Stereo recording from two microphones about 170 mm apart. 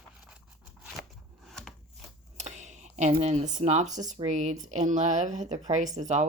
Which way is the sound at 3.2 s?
40° right (ahead or behind).